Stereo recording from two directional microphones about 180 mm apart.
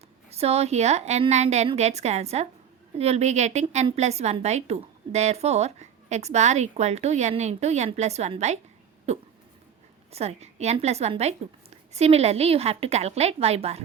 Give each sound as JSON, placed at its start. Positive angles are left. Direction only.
{"t": 0.3, "sound": "a woman's voice", "side_deg": -35}